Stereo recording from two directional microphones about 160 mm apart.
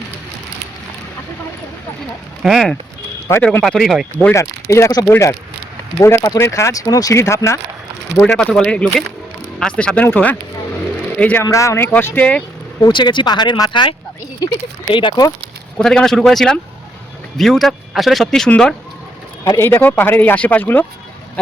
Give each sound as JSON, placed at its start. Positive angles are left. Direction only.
{"t": 2.4, "sound": "speech", "side_deg": 0}
{"t": 3.2, "sound": "speech", "side_deg": 15}
{"t": 3.6, "sound": "speech", "side_deg": 0}
{"t": 4.2, "sound": "speech", "side_deg": 15}
{"t": 8.4, "sound": "speech", "side_deg": 5}
{"t": 12.8, "sound": "speech", "side_deg": 30}
{"t": 14.9, "sound": "speech", "side_deg": 30}
{"t": 15.8, "sound": "speech", "side_deg": 5}